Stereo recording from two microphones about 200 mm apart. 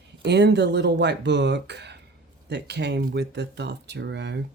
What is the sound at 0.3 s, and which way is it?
Speech, 55° right (ahead or behind).